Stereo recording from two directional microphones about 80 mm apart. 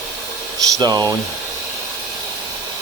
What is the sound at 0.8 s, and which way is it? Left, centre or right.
Speech, right.